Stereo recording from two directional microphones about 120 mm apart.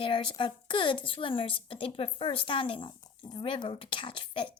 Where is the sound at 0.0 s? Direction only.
45° left (ahead or behind).